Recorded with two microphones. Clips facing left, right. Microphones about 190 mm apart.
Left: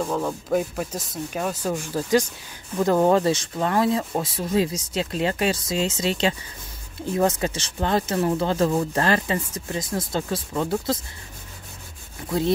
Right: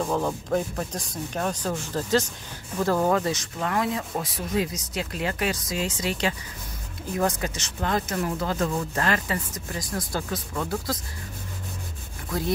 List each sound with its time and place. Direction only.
0.0 s speech: centre (ahead or behind); by 11.0 s 25° left (ahead or behind)
12.3 s speech: 25° left (ahead or behind)